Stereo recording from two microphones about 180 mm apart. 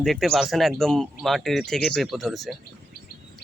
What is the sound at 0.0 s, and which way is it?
Speech, centre (ahead or behind).